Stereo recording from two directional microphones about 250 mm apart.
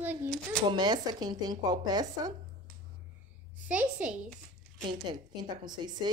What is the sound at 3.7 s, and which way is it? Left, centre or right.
Speech, centre.